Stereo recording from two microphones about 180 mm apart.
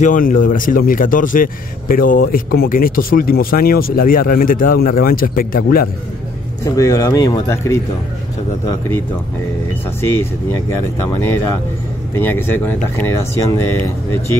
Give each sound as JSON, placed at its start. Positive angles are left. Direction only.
{"t": 0.0, "sound": "speech", "side_deg": 50}
{"t": 6.6, "sound": "speech", "side_deg": 15}
{"t": 10.7, "sound": "speech", "side_deg": 15}